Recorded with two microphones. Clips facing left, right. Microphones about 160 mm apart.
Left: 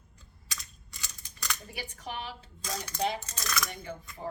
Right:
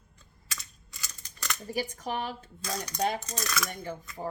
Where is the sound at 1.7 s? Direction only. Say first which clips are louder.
Right 12 dB; 40° right (ahead or behind).